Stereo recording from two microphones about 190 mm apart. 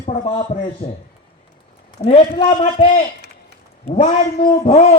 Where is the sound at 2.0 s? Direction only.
30° left (ahead or behind).